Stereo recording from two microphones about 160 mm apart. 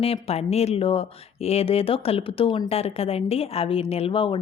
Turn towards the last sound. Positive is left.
turn(degrees=35)  # may be behind; listen again after turning